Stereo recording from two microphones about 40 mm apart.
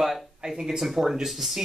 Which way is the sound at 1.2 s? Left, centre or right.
Centre.